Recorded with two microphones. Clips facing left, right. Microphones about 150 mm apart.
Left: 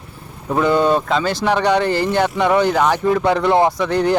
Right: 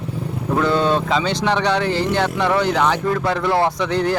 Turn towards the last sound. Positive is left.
turn(degrees=10)  # may be behind; listen again after turning